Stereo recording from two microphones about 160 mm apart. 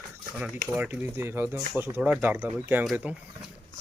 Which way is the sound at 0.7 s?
10° right (ahead or behind).